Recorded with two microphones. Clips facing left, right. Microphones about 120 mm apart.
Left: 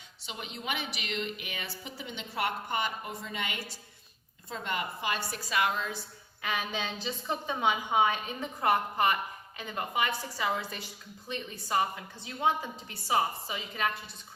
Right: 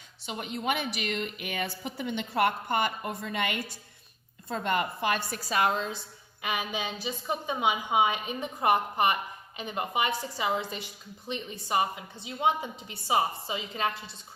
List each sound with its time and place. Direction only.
0.3 s a woman's voice: 50° right (ahead or behind)
5.5 s a woman's voice: 35° right (ahead or behind)
6.4 s a woman's voice: 15° right (ahead or behind)